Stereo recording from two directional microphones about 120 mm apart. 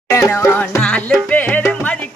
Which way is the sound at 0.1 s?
25° left (ahead or behind).